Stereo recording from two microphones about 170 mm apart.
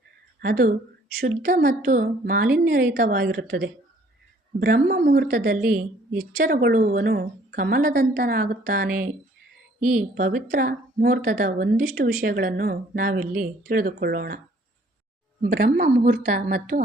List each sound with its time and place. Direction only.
0.3 s a woman's voice: 60° right (ahead or behind)
10.2 s a woman's voice: 50° right (ahead or behind)
15.4 s a woman's voice: 60° right (ahead or behind)